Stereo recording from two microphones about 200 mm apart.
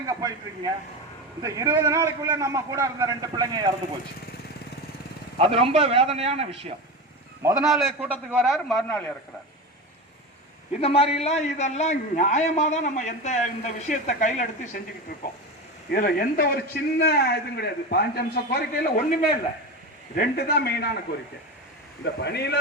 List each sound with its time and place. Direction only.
0.1 s a man's voice: 20° right (ahead or behind)
5.4 s a man's voice: 30° right (ahead or behind)
7.6 s a man's voice: centre (ahead or behind)
8.7 s a man's voice: 5° left (ahead or behind)
10.8 s a man's voice: 30° left (ahead or behind); by 18.6 s 55° left (ahead or behind)
20.1 s a man's voice: 50° left (ahead or behind)
22.0 s speech: 55° left (ahead or behind)